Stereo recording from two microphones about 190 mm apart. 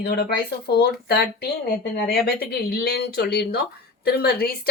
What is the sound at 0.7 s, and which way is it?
Speech, 55° left (ahead or behind).